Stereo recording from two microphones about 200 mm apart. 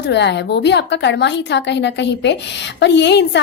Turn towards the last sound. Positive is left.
turn(degrees=60)  # may be behind; listen again after turning